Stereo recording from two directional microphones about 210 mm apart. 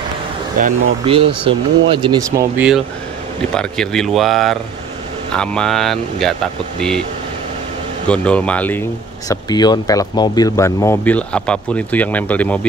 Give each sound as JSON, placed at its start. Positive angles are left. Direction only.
{"t": 1.0, "sound": "speech", "side_deg": -25}
{"t": 2.5, "sound": "speech", "side_deg": -5}
{"t": 8.1, "sound": "speech", "side_deg": 5}
{"t": 9.3, "sound": "speech", "side_deg": 20}